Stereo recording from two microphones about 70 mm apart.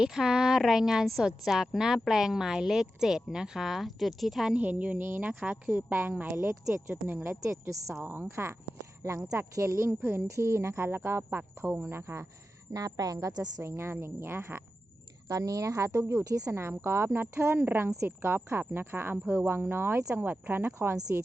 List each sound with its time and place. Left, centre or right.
0.0 s a woman's voice: centre
4.5 s a woman's voice: right
5.4 s a woman's voice: centre
5.9 s a woman's voice: right
7.6 s speech: right
8.0 s a woman's voice: right
9.0 s speech: right
12.7 s speech: right
13.2 s a woman's voice: right
13.6 s speech: right
15.3 s speech: right
17.6 s a woman's voice: right
20.1 s a woman's voice: right
20.7 s speech: right